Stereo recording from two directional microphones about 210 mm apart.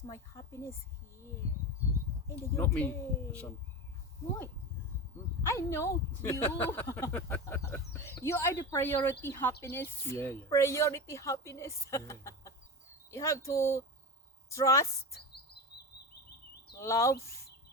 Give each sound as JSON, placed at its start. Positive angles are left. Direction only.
{"t": 0.1, "sound": "speech", "side_deg": 15}
{"t": 2.2, "sound": "speech", "side_deg": 10}
{"t": 5.5, "sound": "speech", "side_deg": 15}
{"t": 16.7, "sound": "speech", "side_deg": 15}